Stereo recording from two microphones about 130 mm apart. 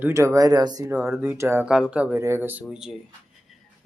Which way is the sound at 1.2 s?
20° right (ahead or behind).